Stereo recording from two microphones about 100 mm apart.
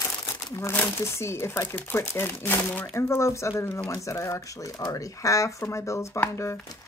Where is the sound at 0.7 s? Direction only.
25° left (ahead or behind).